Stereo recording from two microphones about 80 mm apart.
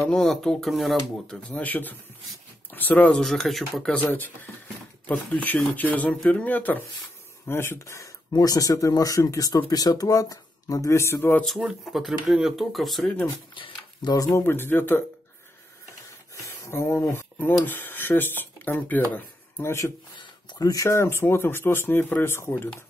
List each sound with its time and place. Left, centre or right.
0.1 s speech: centre
1.6 s speech: left
3.2 s speech: centre
3.9 s speech: left
11.4 s speech: centre
14.3 s speech: left
16.4 s speech: left
17.6 s speech: left
20.2 s speech: left